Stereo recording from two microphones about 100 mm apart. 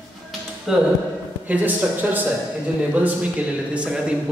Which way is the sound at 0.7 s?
5° right (ahead or behind).